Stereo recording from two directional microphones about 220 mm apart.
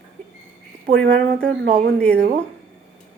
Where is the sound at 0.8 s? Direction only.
50° right (ahead or behind).